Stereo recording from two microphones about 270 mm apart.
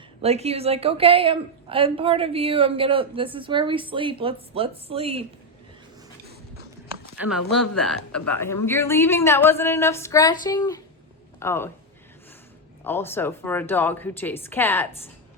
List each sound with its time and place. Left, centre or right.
0.2 s a woman's voice: right
7.2 s a woman's voice: centre
12.8 s a woman's voice: centre